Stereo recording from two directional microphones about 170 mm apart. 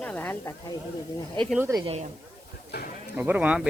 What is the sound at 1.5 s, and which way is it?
Speech, 15° right (ahead or behind).